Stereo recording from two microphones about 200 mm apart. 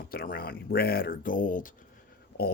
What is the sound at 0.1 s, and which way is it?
Speech, 45° left (ahead or behind).